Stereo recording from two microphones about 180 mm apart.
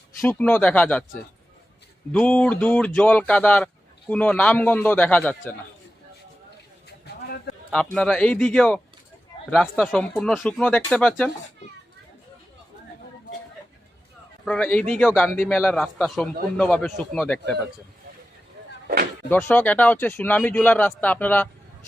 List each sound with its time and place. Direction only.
0.2 s a man's voice: 10° left (ahead or behind)
2.1 s a man's voice: 5° left (ahead or behind)
7.0 s a sound: 60° left (ahead or behind)
7.9 s speech: 5° left (ahead or behind)
14.4 s a man's voice: 5° left (ahead or behind)
19.3 s a man's voice: 10° left (ahead or behind)